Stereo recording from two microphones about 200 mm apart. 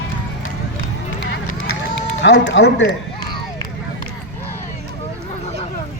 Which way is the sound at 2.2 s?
65° left (ahead or behind).